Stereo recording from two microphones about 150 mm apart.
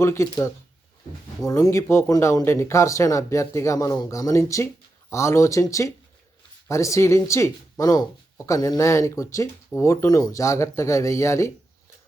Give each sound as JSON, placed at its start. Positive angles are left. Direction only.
{"t": 0.0, "sound": "speech", "side_deg": 20}